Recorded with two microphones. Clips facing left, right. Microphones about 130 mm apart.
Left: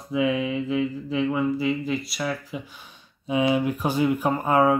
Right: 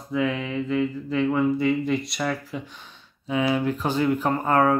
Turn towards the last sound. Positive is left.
turn(degrees=10)  # may be behind; listen again after turning